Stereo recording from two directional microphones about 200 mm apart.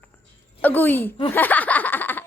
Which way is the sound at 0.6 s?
10° left (ahead or behind).